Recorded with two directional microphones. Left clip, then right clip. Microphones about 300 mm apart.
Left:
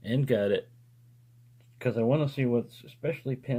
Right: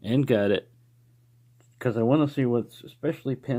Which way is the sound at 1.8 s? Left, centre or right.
Right.